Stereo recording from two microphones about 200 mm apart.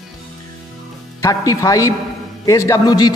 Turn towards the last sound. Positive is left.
turn(degrees=20)  # may be behind; listen again after turning